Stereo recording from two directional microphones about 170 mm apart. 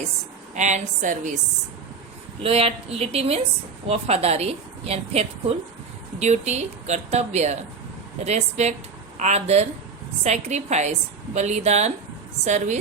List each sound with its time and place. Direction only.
0.5 s a woman's voice: 45° right (ahead or behind)
2.4 s a woman's voice: 35° right (ahead or behind)